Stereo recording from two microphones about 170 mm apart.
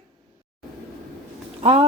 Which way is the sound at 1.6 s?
35° right (ahead or behind).